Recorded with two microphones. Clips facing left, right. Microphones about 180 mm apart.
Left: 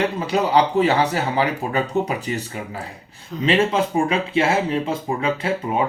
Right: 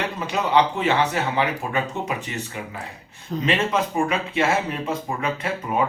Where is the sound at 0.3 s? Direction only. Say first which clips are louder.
Left 1 dB; 35° left (ahead or behind).